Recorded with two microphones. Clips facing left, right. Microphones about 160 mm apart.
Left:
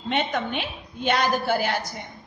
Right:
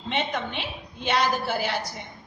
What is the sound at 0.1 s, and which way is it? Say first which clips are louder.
A woman's voice: left 3 dB; 55° left (ahead or behind).